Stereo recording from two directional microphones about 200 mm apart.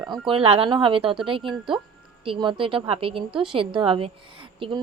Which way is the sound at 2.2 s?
25° right (ahead or behind).